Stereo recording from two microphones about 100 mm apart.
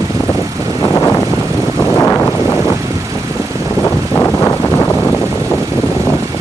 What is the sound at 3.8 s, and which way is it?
Vehicle, 25° left (ahead or behind).